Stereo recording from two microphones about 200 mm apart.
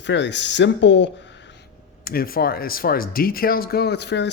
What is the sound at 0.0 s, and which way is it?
Speech, 60° left (ahead or behind).